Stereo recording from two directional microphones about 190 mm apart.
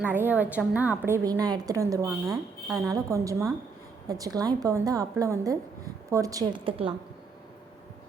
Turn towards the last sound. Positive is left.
turn(degrees=-30)  # may be behind; listen again after turning